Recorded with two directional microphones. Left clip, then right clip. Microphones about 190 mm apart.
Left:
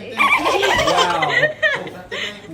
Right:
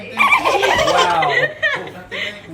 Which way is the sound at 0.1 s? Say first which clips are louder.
Right 2 dB; centre (ahead or behind).